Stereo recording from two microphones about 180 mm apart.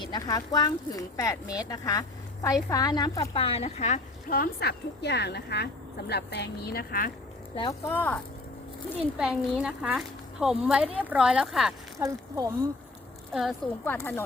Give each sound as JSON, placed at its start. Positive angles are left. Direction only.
{"t": 0.0, "sound": "speech", "side_deg": 20}
{"t": 4.3, "sound": "speech", "side_deg": 60}
{"t": 7.5, "sound": "speech", "side_deg": 25}
{"t": 7.9, "sound": "speech", "side_deg": 10}
{"t": 9.1, "sound": "speech", "side_deg": -5}
{"t": 11.9, "sound": "speech", "side_deg": -15}
{"t": 13.3, "sound": "speech", "side_deg": 0}
{"t": 13.8, "sound": "speech", "side_deg": 10}